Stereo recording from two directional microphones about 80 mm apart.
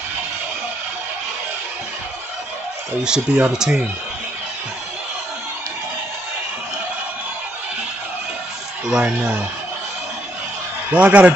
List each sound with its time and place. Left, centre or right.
3.0 s speech: centre
8.8 s speech: centre
10.9 s speech: centre